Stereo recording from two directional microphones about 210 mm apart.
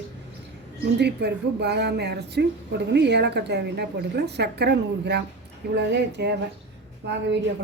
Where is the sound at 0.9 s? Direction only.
55° right (ahead or behind).